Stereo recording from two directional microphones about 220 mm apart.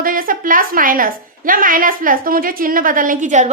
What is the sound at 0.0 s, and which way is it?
A woman's voice, 40° right (ahead or behind).